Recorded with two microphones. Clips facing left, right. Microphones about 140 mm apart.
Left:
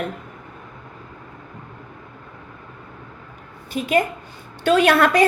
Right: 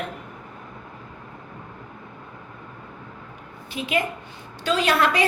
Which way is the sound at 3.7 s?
45° left (ahead or behind).